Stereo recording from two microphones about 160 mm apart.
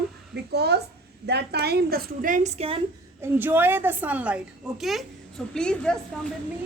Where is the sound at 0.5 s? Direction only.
90° right; by 2.8 s 40° right (ahead or behind).